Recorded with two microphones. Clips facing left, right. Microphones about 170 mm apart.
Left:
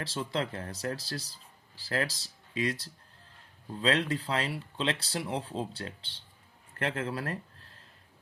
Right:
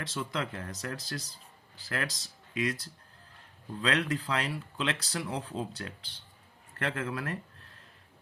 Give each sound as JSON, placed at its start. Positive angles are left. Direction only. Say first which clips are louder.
{"t": 0.0, "sound": "speech", "louder": "left 2 dB", "side_deg": 30}